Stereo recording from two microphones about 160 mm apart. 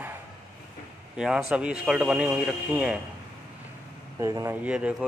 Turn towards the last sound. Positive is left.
turn(degrees=-5)  # may be behind; listen again after turning